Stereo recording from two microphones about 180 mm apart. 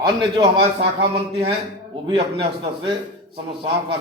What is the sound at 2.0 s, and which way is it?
Speech, 25° right (ahead or behind).